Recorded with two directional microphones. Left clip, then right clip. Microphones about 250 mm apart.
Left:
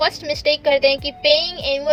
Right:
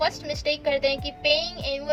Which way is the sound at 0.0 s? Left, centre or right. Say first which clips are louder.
Left 7 dB; left.